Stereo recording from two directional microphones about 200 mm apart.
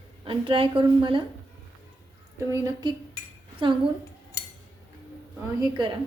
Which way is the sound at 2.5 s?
20° right (ahead or behind).